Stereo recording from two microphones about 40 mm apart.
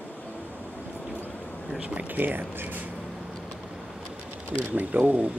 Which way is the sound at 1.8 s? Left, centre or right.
Right.